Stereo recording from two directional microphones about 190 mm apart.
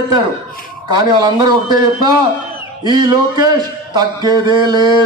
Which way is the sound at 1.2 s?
20° right (ahead or behind).